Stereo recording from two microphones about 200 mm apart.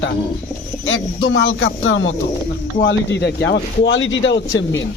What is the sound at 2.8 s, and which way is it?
Speech, 60° left (ahead or behind).